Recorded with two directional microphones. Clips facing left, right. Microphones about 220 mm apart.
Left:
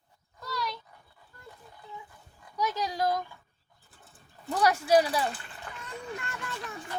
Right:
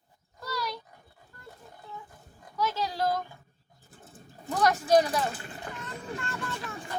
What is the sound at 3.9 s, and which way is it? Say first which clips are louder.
Pigeon: right 7 dB; 40° right (ahead or behind).